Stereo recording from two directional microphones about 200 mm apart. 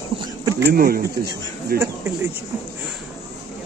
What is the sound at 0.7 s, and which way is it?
Speech, 50° right (ahead or behind).